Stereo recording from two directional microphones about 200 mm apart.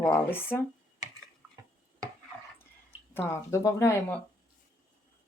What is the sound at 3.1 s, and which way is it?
Speech, 15° left (ahead or behind).